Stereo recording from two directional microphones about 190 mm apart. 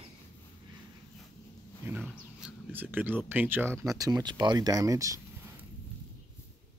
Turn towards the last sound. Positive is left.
turn(degrees=-15)  # may be behind; listen again after turning